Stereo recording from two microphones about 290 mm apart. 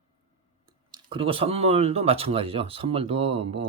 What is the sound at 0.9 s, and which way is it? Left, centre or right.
Speech, centre.